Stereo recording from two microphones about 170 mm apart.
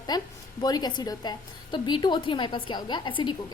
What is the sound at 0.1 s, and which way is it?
A woman's voice, 25° left (ahead or behind).